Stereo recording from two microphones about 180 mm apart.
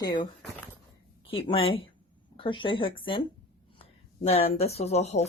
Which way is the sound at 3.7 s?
30° left (ahead or behind).